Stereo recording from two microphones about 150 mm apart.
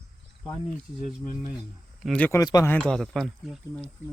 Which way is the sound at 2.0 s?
5° left (ahead or behind).